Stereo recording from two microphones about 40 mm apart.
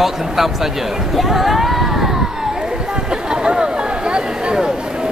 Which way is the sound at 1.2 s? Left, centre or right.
Centre.